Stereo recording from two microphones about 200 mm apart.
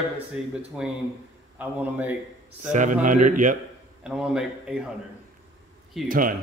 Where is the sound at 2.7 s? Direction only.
40° right (ahead or behind).